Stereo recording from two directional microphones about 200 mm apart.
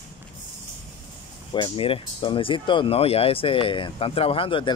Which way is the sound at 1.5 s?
25° left (ahead or behind).